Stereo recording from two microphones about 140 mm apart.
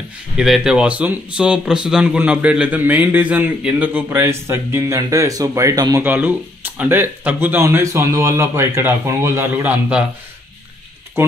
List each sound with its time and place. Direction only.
0.4 s speech: 5° right (ahead or behind); by 6.0 s 25° right (ahead or behind)
6.0 s speech: 10° right (ahead or behind)
11.2 s speech: 15° right (ahead or behind)